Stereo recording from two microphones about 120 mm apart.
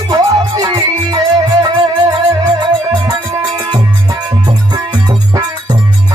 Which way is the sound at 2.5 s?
35° right (ahead or behind).